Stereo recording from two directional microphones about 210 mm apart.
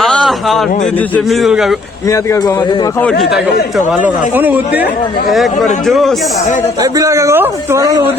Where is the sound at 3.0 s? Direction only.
5° left (ahead or behind).